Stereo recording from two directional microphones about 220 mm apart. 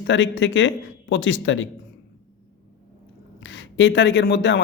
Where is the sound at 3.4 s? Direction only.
55° left (ahead or behind).